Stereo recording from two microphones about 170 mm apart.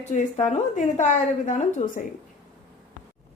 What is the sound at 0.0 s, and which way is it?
A woman's voice, 45° left (ahead or behind).